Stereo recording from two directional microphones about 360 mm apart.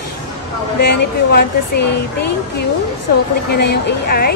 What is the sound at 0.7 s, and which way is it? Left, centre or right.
Speech, left.